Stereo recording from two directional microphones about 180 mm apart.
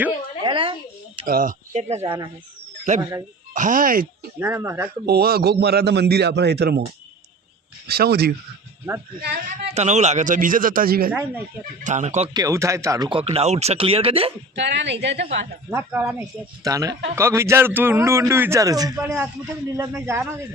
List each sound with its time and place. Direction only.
0.4 s a sound: 30° right (ahead or behind)
1.3 s speech: 50° right (ahead or behind)
3.0 s speech: 25° right (ahead or behind)
3.5 s a man's voice: 45° right (ahead or behind)
4.4 s a man's voice: 15° right (ahead or behind)
5.0 s a man's voice: 60° right (ahead or behind)
7.9 s a man's voice: 60° right (ahead or behind)
9.7 s a man's voice: 40° right (ahead or behind); by 11.1 s 55° right (ahead or behind)
11.8 s speech: 40° right (ahead or behind)
12.3 s speech: 20° right (ahead or behind)
14.5 s a woman's voice: 75° right (ahead or behind)
15.7 s a man's voice: 10° right (ahead or behind)